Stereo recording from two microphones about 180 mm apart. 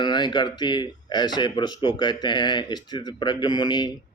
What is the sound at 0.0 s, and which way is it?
Speech, 25° left (ahead or behind).